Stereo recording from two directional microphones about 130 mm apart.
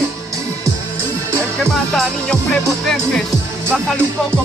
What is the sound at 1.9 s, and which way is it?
Music, 5° left (ahead or behind).